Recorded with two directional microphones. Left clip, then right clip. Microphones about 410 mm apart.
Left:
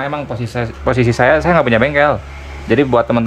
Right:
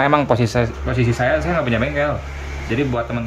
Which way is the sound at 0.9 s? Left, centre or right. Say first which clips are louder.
Left 10 dB; centre.